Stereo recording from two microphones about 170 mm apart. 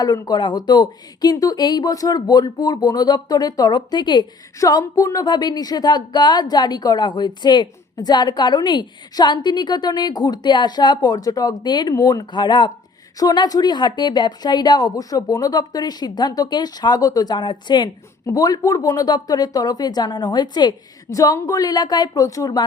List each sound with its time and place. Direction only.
0.0 s speech: 20° left (ahead or behind)